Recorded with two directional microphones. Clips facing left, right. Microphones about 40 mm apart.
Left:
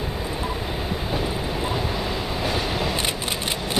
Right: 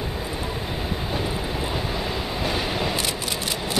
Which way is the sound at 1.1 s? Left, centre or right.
Centre.